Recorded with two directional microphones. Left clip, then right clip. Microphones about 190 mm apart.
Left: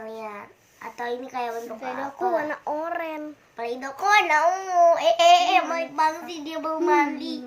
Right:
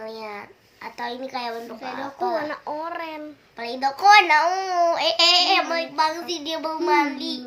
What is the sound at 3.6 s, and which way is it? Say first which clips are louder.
Child singing: right 6 dB; 25° right (ahead or behind).